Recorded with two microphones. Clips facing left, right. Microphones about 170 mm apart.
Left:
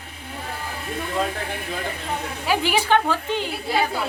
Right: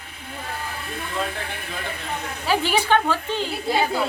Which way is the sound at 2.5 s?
10° left (ahead or behind).